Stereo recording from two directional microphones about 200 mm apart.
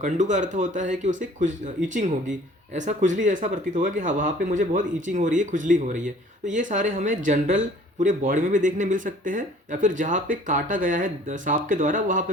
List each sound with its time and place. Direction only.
0.0 s speech: 35° right (ahead or behind)